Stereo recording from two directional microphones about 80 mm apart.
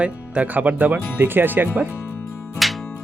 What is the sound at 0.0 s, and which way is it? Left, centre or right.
Speech, centre.